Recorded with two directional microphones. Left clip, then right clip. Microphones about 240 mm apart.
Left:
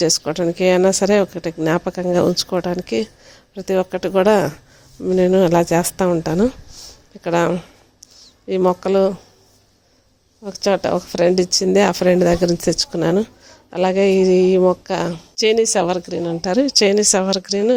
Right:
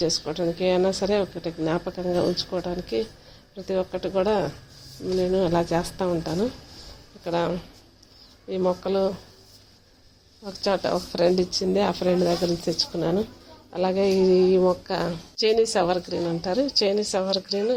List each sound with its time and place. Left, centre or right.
0.0 s a woman's voice: left
10.4 s a woman's voice: left